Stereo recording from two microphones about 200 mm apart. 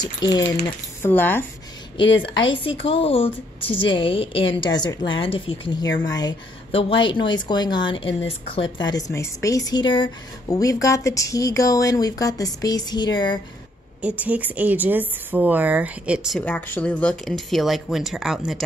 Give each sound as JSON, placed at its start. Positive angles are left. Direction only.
{"t": 0.0, "sound": "speech", "side_deg": 20}
{"t": 2.2, "sound": "speech", "side_deg": 25}
{"t": 14.0, "sound": "speech", "side_deg": -5}